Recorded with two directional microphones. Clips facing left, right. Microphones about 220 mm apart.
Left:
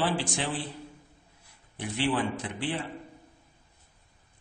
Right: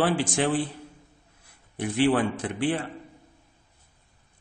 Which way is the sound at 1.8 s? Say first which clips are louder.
Right 6 dB; 50° right (ahead or behind).